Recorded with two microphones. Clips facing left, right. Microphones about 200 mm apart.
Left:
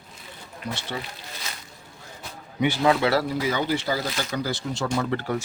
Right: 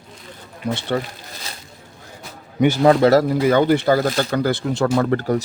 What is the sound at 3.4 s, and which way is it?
Speech, 55° right (ahead or behind).